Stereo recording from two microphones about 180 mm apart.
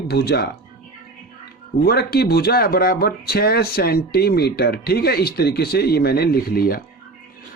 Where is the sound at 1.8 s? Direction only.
60° left (ahead or behind).